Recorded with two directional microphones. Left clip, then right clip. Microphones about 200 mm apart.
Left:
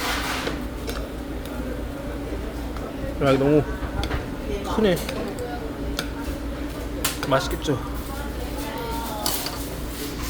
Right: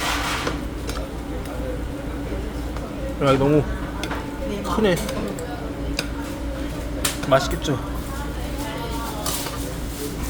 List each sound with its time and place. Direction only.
3.2 s speech: centre (ahead or behind)
4.7 s speech: centre (ahead or behind)
7.3 s speech: centre (ahead or behind)